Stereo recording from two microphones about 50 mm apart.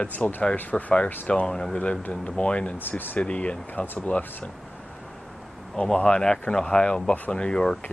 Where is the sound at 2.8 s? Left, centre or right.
Left.